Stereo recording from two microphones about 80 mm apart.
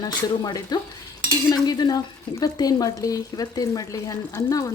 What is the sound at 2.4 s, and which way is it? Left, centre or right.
Stir, left.